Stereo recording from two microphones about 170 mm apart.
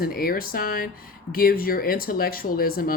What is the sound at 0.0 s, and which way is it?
Speech, 60° left (ahead or behind).